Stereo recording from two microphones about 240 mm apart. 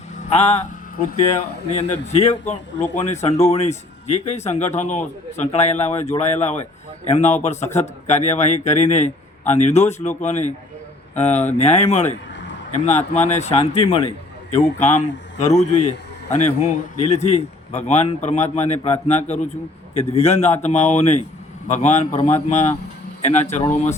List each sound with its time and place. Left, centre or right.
0.3 s a man's voice: left
1.7 s a man's voice: left